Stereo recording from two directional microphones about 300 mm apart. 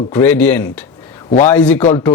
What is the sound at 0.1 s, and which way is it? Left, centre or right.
Speech, centre.